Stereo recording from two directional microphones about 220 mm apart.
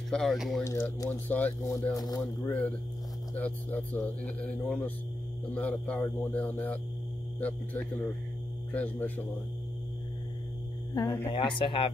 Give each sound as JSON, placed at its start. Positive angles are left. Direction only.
{"t": 0.1, "sound": "speech", "side_deg": 0}
{"t": 0.7, "sound": "speech", "side_deg": 15}
{"t": 11.0, "sound": "speech", "side_deg": 20}